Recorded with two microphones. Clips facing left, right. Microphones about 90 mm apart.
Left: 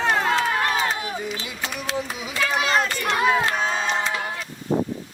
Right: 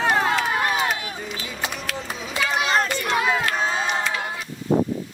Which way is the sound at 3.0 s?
Centre (ahead or behind).